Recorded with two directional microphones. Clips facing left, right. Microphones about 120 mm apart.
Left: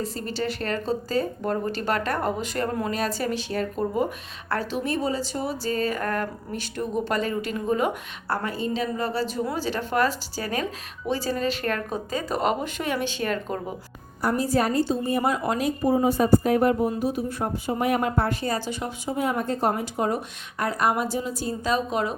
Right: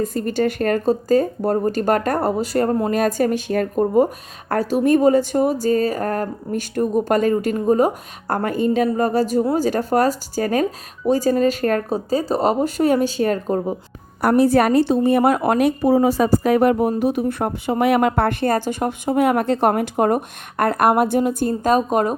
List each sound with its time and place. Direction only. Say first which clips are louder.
0.0 s speech: right 9 dB; 50° right (ahead or behind)
14.2 s speech: right 8 dB; 65° right (ahead or behind)
17.0 s speech: right 7 dB; 65° right (ahead or behind); by 22.1 s 45° right (ahead or behind)